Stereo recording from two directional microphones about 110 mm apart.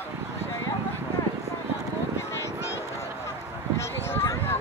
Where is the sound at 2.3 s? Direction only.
25° left (ahead or behind).